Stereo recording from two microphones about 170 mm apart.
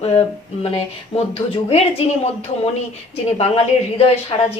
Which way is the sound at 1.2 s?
35° left (ahead or behind).